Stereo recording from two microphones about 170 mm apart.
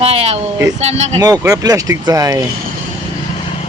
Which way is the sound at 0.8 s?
40° right (ahead or behind).